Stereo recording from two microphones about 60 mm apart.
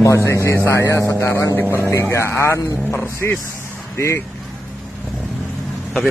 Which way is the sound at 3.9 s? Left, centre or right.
Left.